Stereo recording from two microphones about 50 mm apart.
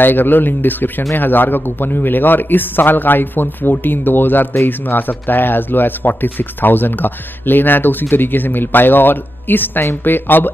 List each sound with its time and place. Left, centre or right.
0.0 s speech: left